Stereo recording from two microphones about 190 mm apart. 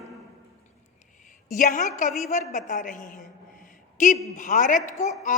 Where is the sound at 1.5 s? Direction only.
45° left (ahead or behind).